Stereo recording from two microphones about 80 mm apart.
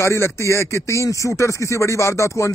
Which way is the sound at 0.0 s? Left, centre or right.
Left.